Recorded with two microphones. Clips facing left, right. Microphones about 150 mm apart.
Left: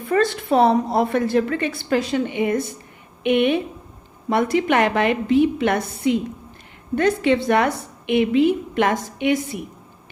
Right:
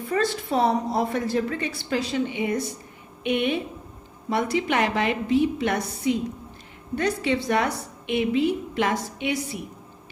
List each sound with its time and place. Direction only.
0.1 s a woman's voice: 60° left (ahead or behind)